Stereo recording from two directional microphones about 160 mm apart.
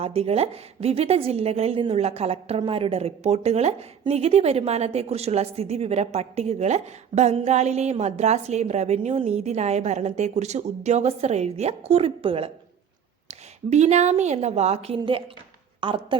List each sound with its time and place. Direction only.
0.0 s a woman's voice: 40° right (ahead or behind)
13.7 s a woman's voice: 45° right (ahead or behind)